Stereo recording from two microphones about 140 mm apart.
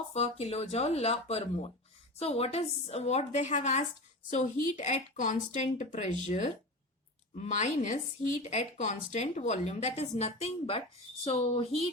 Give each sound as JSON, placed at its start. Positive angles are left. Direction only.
{"t": 0.1, "sound": "a woman's voice", "side_deg": 50}